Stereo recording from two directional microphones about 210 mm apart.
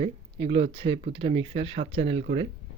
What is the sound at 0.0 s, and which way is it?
Speech, 25° right (ahead or behind).